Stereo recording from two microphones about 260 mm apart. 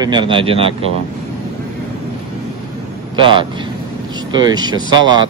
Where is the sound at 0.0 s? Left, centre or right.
Centre.